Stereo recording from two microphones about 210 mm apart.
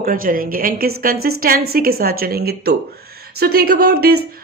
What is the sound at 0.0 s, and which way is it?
A woman's voice, 45° right (ahead or behind).